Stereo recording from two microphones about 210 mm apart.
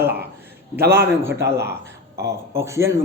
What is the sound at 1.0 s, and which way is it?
Speech, 10° right (ahead or behind).